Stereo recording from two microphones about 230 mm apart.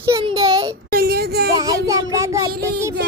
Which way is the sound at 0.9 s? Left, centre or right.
Right.